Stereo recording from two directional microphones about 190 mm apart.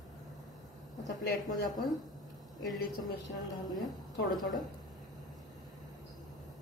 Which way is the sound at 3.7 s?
Centre (ahead or behind).